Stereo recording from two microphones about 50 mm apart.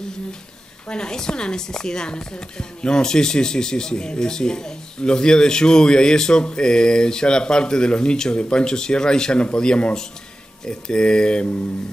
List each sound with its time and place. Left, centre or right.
0.8 s a woman's voice: centre